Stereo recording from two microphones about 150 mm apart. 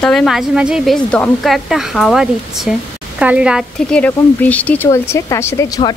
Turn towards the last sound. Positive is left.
turn(degrees=20)  # may be behind; listen again after turning